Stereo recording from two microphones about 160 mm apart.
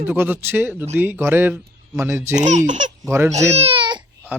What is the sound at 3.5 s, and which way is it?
Baby cry, 35° right (ahead or behind).